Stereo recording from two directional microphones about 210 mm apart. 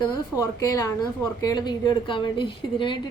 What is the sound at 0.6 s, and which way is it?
A woman's voice, 15° left (ahead or behind).